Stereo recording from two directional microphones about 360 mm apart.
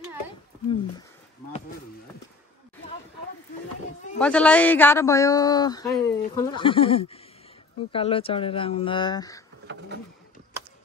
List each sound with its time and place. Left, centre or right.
4.2 s speech: centre